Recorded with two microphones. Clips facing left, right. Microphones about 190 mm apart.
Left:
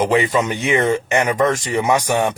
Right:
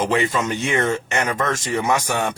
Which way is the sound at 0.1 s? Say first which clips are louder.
Left 3 dB; 15° left (ahead or behind).